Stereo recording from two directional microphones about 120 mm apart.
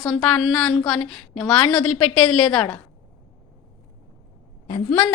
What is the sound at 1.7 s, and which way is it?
Speech, 45° left (ahead or behind).